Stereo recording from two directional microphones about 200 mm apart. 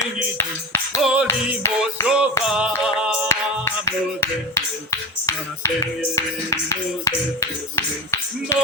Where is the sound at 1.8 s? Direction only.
5° right (ahead or behind).